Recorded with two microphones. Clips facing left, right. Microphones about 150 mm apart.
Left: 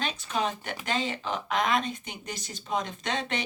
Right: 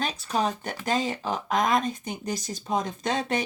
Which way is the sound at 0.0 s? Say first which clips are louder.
Right 3 dB; 40° right (ahead or behind).